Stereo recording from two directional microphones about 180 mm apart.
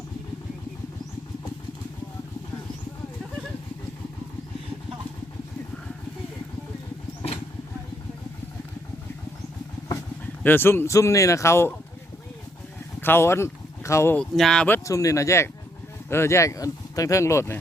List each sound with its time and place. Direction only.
10.4 s speech: 10° left (ahead or behind)
13.0 s speech: 10° left (ahead or behind)
14.8 s speech: 20° left (ahead or behind)